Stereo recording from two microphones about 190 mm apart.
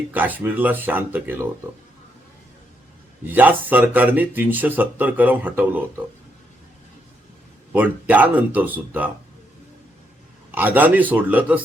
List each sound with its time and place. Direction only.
0.1 s speech: 10° right (ahead or behind)
3.2 s speech: 10° right (ahead or behind)
8.0 s speech: 10° right (ahead or behind)
10.5 s speech: 10° right (ahead or behind)